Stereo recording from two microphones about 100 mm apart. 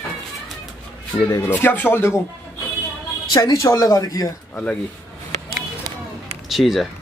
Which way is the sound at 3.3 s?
35° left (ahead or behind).